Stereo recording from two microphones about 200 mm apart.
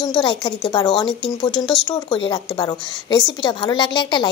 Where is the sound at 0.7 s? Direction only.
20° left (ahead or behind).